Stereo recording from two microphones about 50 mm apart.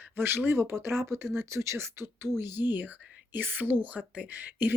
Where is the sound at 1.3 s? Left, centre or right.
Right.